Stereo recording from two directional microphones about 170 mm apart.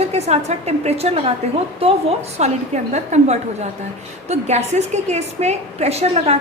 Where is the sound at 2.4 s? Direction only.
40° right (ahead or behind).